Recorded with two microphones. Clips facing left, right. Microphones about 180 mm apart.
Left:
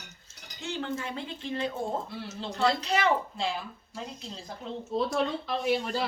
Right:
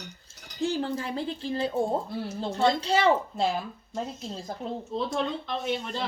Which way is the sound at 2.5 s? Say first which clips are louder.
Right 3 dB; 30° right (ahead or behind).